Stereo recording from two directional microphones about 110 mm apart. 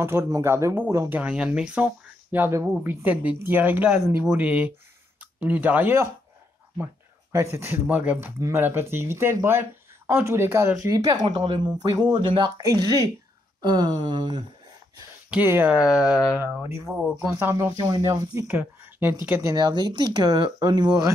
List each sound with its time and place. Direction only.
0.0 s speech: 25° right (ahead or behind)
2.3 s a woman's voice: 20° right (ahead or behind)
7.5 s speech: 25° right (ahead or behind)
8.4 s speech: 25° right (ahead or behind)
10.9 s speech: 35° right (ahead or behind)
12.6 s speech: 35° right (ahead or behind)
15.3 s a woman's voice: 15° right (ahead or behind)
16.6 s speech: 25° right (ahead or behind)
17.0 s a woman's voice: 10° right (ahead or behind)
17.8 s speech: 30° right (ahead or behind)
18.5 s speech: 20° right (ahead or behind)
19.4 s speech: 40° right (ahead or behind)